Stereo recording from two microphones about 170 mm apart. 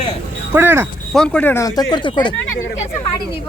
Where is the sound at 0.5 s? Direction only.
15° right (ahead or behind).